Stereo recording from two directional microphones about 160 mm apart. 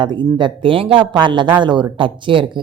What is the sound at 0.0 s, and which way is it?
A woman's voice, 30° right (ahead or behind).